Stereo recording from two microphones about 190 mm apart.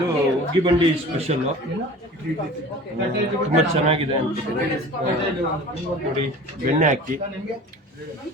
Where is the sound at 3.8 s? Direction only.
30° right (ahead or behind).